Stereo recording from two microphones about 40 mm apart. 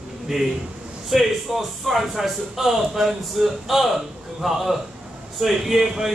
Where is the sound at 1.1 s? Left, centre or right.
Centre.